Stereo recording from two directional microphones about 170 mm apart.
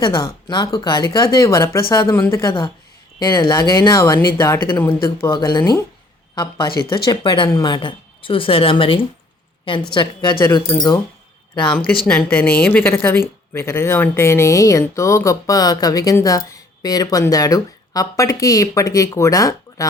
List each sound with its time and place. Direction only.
0.0 s a woman's voice: 25° left (ahead or behind)
5.3 s a woman's voice: 25° left (ahead or behind)
12.0 s a woman's voice: 10° left (ahead or behind)